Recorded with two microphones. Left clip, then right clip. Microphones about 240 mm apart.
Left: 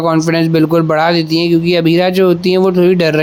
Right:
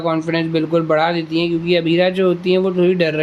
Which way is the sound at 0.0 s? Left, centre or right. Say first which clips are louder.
Left 6 dB; left.